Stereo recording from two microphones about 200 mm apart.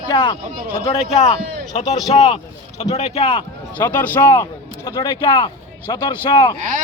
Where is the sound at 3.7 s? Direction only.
10° left (ahead or behind).